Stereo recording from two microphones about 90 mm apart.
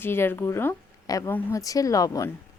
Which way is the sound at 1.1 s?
40° left (ahead or behind).